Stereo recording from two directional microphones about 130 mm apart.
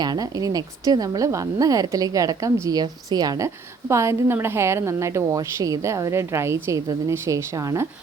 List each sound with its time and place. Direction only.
0.0 s a woman's voice: 30° right (ahead or behind)